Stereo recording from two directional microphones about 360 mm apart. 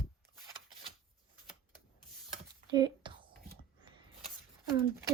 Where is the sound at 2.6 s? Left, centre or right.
Centre.